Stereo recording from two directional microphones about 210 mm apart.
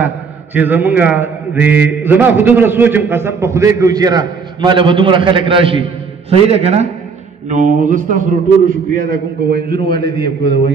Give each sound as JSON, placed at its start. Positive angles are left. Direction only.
{"t": 0.6, "sound": "a man's voice", "side_deg": -10}